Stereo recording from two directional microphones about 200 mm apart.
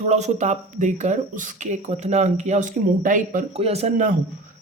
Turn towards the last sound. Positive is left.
turn(degrees=-35)  # may be behind; listen again after turning